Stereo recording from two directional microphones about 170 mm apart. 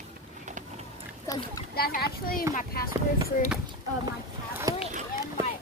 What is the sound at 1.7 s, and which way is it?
A child's voice, 65° left (ahead or behind).